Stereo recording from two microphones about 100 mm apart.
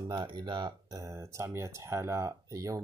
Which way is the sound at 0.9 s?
35° right (ahead or behind).